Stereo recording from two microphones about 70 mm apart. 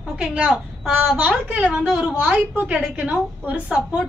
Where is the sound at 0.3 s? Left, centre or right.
Centre.